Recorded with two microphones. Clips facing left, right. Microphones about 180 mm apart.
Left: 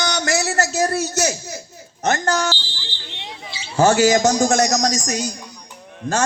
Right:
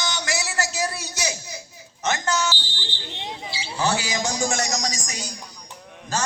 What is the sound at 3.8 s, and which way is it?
A man's voice, 45° left (ahead or behind).